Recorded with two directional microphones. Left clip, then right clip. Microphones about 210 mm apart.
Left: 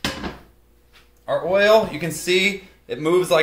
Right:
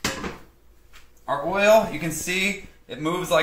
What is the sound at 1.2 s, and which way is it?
Speech, 35° left (ahead or behind).